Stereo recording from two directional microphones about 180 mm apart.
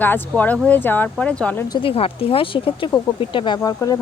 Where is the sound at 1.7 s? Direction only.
30° left (ahead or behind).